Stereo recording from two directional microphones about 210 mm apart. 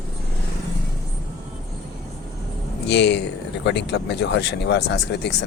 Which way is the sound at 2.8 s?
55° left (ahead or behind).